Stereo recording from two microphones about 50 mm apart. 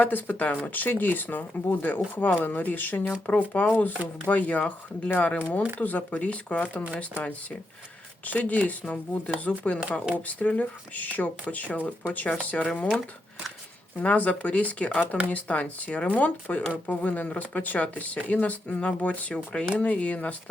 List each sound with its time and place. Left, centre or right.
0.0 s speech: left
0.7 s speech: left
8.2 s speech: left
14.0 s speech: left